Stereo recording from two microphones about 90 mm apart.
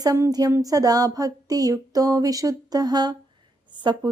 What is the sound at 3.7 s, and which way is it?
Speech, 55° right (ahead or behind).